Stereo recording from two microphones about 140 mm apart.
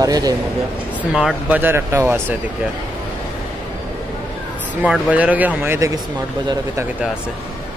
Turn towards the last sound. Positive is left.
turn(degrees=-15)  # may be behind; listen again after turning